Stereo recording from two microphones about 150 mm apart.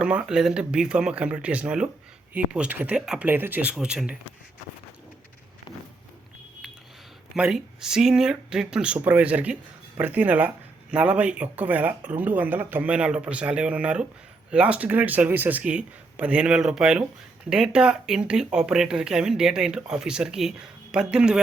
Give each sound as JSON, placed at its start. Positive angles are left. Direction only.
{"t": 0.0, "sound": "speech", "side_deg": -5}
{"t": 7.3, "sound": "speech", "side_deg": -5}